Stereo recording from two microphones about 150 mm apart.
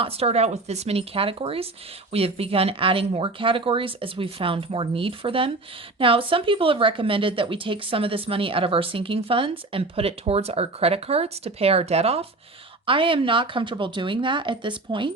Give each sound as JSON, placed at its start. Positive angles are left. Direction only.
{"t": 0.0, "sound": "a woman's voice", "side_deg": -45}